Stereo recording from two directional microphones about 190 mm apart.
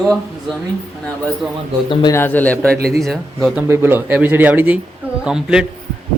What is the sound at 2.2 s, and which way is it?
A man's voice, 10° left (ahead or behind).